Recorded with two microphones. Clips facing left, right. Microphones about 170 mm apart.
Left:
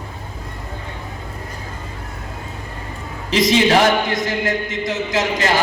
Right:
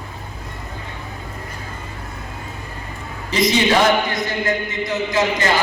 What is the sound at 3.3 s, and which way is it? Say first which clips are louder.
A man's voice: left 2 dB; 90° left.